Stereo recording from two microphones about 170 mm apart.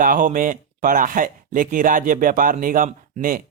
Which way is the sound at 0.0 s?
55° right (ahead or behind).